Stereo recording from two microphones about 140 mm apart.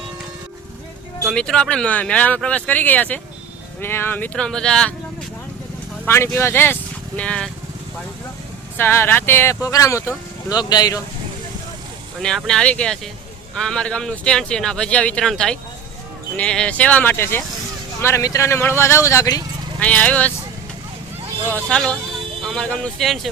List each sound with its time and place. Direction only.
1.2 s speech: 5° left (ahead or behind)
6.1 s speech: 20° left (ahead or behind)
8.8 s speech: 15° left (ahead or behind)
12.5 s speech: 5° left (ahead or behind); by 19.4 s 25° left (ahead or behind)
19.8 s speech: 10° left (ahead or behind)
21.5 s speech: 5° left (ahead or behind)